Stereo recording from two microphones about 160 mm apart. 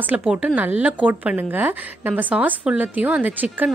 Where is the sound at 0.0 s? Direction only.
5° right (ahead or behind).